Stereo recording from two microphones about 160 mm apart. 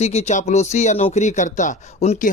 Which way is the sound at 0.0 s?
45° left (ahead or behind).